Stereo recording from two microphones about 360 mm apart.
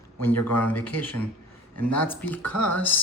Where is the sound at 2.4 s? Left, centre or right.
Left.